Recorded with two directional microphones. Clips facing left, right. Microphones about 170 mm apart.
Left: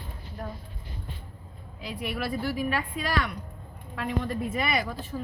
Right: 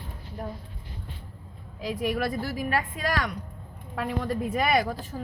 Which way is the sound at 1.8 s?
40° right (ahead or behind).